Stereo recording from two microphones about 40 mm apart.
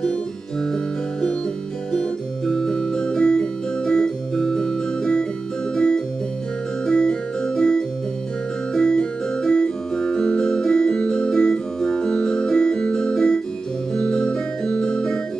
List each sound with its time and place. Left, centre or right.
1.9 s music: centre